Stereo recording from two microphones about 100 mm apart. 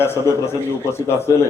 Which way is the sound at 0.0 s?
25° left (ahead or behind).